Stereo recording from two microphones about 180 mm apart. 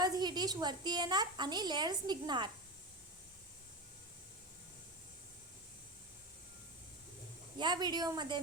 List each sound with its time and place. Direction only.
0.0 s a woman's voice: 20° right (ahead or behind)
7.6 s a woman's voice: 25° right (ahead or behind)